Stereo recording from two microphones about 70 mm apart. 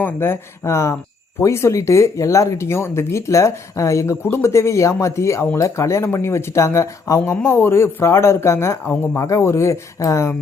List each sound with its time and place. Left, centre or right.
0.0 s speech: left